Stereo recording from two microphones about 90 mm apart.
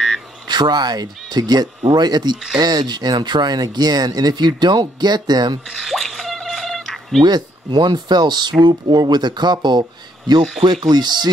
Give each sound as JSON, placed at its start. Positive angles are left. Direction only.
{"t": 0.5, "sound": "speech", "side_deg": -55}
{"t": 5.7, "sound": "a sound", "side_deg": 0}
{"t": 7.2, "sound": "speech", "side_deg": -50}